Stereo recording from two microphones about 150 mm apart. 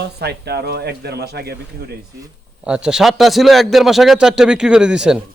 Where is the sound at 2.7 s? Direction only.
5° right (ahead or behind).